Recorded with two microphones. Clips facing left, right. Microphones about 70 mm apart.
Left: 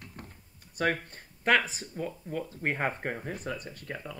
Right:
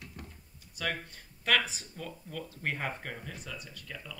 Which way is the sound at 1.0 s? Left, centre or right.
Left.